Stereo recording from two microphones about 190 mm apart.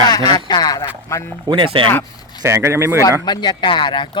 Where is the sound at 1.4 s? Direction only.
25° right (ahead or behind).